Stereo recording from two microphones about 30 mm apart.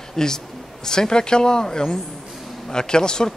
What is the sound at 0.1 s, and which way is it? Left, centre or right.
A man's voice, left.